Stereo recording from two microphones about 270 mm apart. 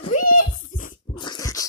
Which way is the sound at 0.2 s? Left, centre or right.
Left.